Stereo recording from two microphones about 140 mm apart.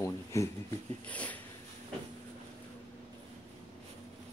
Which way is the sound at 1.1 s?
10° left (ahead or behind).